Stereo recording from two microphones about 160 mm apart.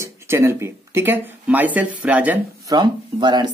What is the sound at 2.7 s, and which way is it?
Speech, 30° right (ahead or behind).